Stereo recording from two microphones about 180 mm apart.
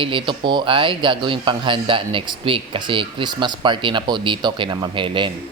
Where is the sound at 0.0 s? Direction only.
30° right (ahead or behind).